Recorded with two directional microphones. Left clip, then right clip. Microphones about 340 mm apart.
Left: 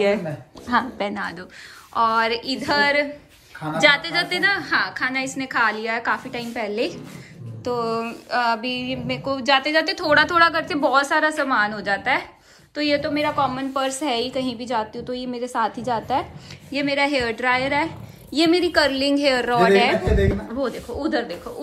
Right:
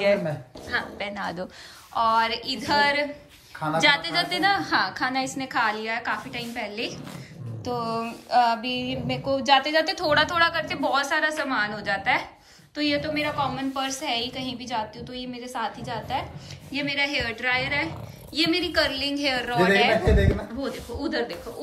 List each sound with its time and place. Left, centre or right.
0.0 s a woman's voice: centre
0.7 s a sound: centre
12.7 s a woman's voice: centre